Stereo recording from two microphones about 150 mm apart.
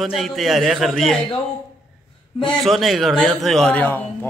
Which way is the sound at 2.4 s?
Centre (ahead or behind).